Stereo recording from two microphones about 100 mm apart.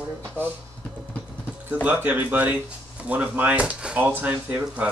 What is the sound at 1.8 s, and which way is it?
Speech, 20° right (ahead or behind).